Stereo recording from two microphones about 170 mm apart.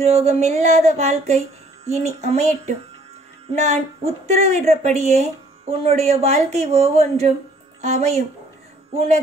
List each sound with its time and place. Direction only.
0.0 s speech: 40° right (ahead or behind)